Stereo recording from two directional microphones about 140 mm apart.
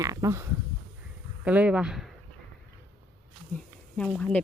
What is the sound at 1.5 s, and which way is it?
Speech, 10° right (ahead or behind).